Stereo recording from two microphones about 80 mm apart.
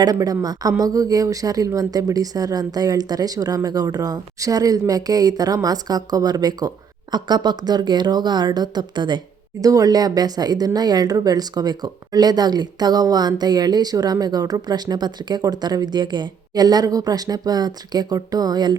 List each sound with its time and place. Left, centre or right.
0.0 s speech: right
9.6 s speech: right